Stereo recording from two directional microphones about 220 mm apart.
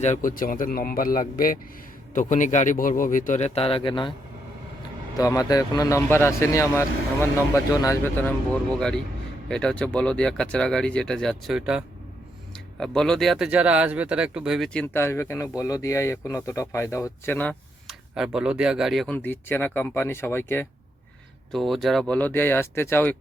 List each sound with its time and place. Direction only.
0.0 s speech: 35° left (ahead or behind)
5.1 s a man's voice: 15° left (ahead or behind)
9.5 s speech: 5° left (ahead or behind)
12.8 s a man's voice: centre (ahead or behind)